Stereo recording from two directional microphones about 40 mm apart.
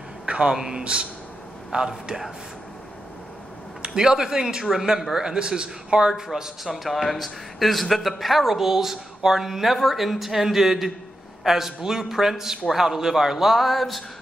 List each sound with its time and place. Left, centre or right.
0.3 s a sound: right
0.6 s a man's voice: centre
3.8 s a man's voice: centre
6.6 s a man's voice: centre